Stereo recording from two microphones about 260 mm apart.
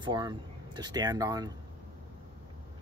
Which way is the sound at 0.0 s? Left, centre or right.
Centre.